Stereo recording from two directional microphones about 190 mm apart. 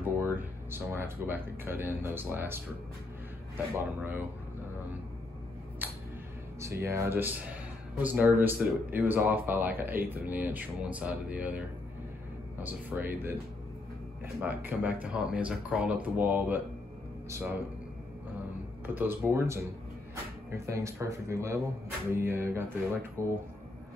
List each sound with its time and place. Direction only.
0.2 s speech: 10° right (ahead or behind)
5.8 s music: 10° right (ahead or behind)
6.8 s speech: 15° right (ahead or behind)
14.4 s speech: 10° right (ahead or behind)
18.9 s speech: 10° right (ahead or behind)